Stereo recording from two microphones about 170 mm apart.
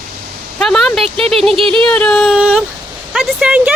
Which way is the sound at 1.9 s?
5° left (ahead or behind).